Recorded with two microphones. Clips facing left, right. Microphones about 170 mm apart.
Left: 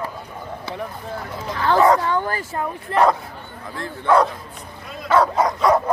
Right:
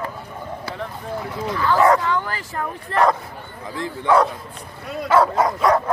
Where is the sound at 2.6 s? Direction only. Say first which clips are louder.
Left 1 dB; 15° left (ahead or behind).